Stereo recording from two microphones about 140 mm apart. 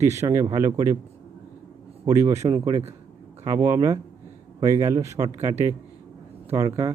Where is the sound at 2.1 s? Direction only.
20° right (ahead or behind).